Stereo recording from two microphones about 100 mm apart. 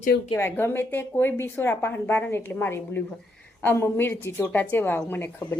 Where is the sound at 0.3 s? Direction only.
25° left (ahead or behind).